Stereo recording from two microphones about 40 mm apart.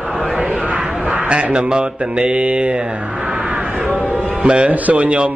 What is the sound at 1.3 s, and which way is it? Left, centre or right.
Mantra, right.